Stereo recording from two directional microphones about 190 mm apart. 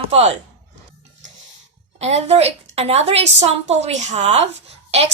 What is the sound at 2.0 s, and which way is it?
A woman's voice, 35° right (ahead or behind).